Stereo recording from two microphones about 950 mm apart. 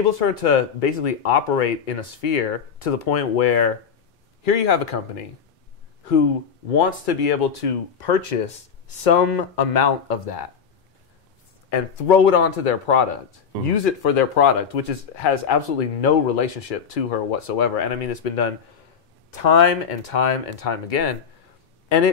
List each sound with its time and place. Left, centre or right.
0.2 s speech: left
6.8 s speech: left
11.7 s speech: left